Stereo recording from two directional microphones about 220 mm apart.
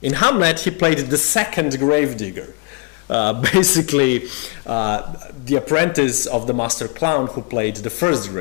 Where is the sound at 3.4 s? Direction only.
15° left (ahead or behind).